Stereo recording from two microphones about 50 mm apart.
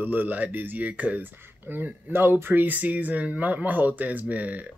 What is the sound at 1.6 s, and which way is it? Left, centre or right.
Speech, right.